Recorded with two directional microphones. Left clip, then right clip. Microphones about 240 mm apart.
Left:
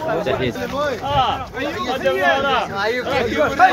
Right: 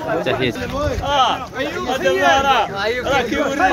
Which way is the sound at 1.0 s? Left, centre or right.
Right.